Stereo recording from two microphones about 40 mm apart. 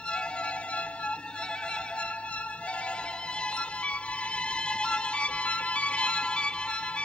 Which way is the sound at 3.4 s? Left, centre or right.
Left.